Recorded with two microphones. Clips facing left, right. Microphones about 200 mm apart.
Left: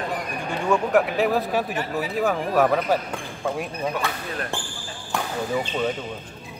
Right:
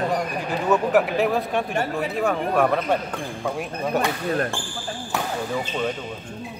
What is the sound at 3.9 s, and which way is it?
Speech, 40° right (ahead or behind).